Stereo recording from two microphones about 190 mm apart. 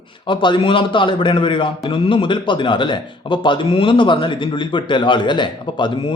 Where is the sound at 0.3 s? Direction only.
25° left (ahead or behind).